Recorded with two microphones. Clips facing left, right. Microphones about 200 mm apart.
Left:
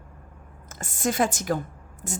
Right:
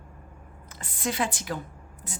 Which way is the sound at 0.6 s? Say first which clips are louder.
Left 4 dB; 45° left (ahead or behind).